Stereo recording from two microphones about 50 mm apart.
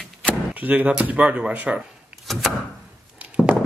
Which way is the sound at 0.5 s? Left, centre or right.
Right.